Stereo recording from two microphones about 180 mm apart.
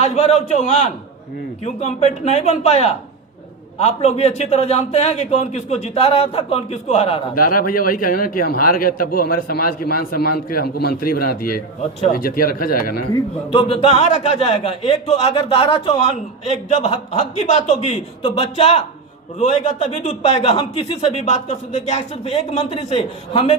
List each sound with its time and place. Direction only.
0.0 s a man's voice: 35° left (ahead or behind)
7.3 s a man's voice: 50° left (ahead or behind)
11.8 s a man's voice: 35° left (ahead or behind)
12.1 s a man's voice: 55° left (ahead or behind)
13.5 s a man's voice: 30° left (ahead or behind)